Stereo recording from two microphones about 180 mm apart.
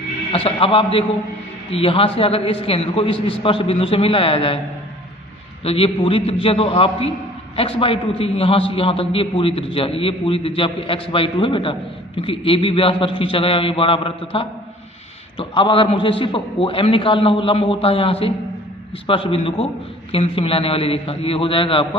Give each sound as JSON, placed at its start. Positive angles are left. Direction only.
{"t": 0.3, "sound": "a man's voice", "side_deg": 30}
{"t": 5.6, "sound": "a man's voice", "side_deg": 30}